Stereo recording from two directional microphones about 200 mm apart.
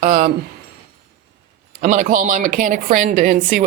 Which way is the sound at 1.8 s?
40° right (ahead or behind).